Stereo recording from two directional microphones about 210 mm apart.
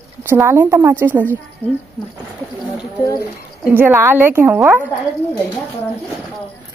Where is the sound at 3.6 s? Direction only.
10° right (ahead or behind).